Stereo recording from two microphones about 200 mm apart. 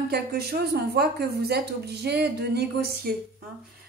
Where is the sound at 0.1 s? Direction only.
50° right (ahead or behind).